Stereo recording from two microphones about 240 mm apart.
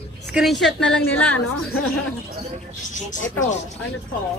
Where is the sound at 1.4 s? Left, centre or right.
Left.